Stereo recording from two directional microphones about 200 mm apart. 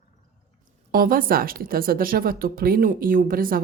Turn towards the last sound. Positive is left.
turn(degrees=-45)  # may be behind; listen again after turning